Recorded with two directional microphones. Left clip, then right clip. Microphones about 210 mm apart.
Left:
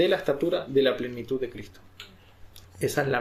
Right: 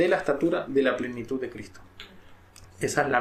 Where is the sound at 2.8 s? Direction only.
70° left (ahead or behind).